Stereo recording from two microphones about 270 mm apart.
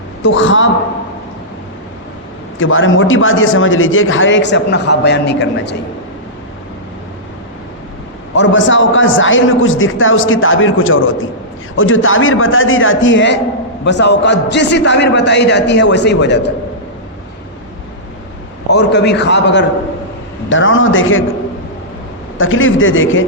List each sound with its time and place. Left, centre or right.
0.2 s a man's voice: left
2.6 s a man's voice: left
8.4 s a man's voice: left
18.7 s a man's voice: left
22.4 s a man's voice: left